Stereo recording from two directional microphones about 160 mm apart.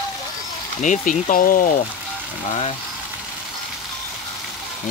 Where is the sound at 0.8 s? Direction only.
50° left (ahead or behind).